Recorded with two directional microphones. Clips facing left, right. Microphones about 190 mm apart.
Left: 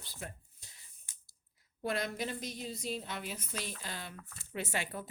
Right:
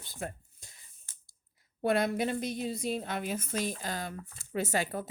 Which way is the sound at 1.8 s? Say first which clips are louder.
Right 8 dB; 60° right (ahead or behind).